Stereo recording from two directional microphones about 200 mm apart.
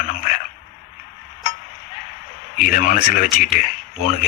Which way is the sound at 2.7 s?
45° left (ahead or behind).